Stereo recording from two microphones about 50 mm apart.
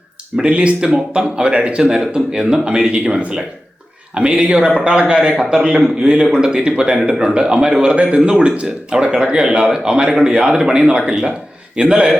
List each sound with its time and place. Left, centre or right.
0.4 s a man's voice: right